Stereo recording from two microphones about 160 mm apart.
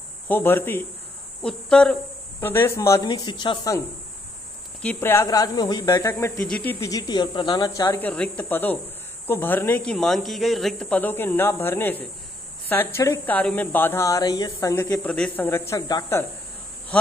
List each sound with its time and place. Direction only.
0.3 s speech: 15° left (ahead or behind)
1.4 s cricket: 5° left (ahead or behind)
2.4 s speech: 15° left (ahead or behind)
3.1 s speech: 30° left (ahead or behind)
4.8 s speech: 15° left (ahead or behind)
15.0 s speech: 5° left (ahead or behind)